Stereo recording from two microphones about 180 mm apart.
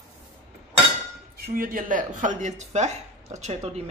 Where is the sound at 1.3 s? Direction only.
50° right (ahead or behind).